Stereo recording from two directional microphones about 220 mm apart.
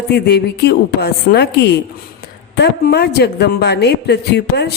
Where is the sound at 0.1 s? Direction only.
50° left (ahead or behind).